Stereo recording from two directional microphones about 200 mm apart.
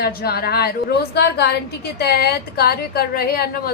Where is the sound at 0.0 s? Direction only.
50° left (ahead or behind).